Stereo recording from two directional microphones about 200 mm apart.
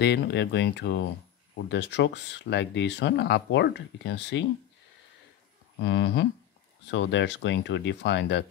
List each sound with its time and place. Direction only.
0.0 s speech: 60° left (ahead or behind)
5.8 s speech: 65° left (ahead or behind)